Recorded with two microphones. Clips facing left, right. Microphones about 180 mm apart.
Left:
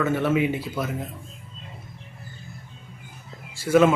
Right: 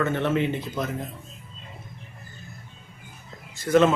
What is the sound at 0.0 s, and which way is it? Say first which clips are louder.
Speech: left 2 dB; 5° left (ahead or behind).